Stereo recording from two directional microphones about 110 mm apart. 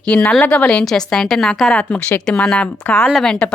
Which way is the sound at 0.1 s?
10° left (ahead or behind).